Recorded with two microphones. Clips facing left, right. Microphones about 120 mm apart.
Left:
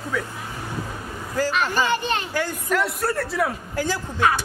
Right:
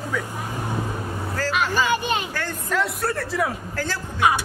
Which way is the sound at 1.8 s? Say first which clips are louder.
Even; 15° right (ahead or behind).